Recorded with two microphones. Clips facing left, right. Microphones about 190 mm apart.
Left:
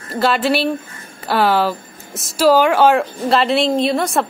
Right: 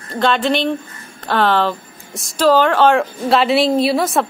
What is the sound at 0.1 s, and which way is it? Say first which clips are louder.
A woman's voice: even; 5° left (ahead or behind).